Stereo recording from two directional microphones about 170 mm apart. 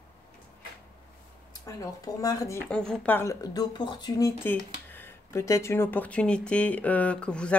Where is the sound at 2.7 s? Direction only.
5° left (ahead or behind); by 4.3 s 25° left (ahead or behind).